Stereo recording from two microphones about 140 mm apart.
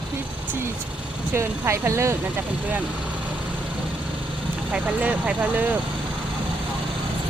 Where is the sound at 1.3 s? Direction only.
20° right (ahead or behind).